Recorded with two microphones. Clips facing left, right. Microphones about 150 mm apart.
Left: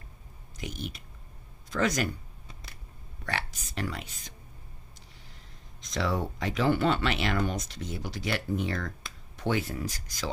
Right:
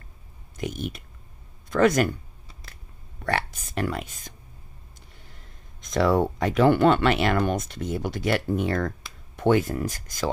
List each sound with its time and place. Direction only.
0.6 s speech: 50° right (ahead or behind)
3.3 s speech: 55° right (ahead or behind)
5.8 s speech: 50° right (ahead or behind)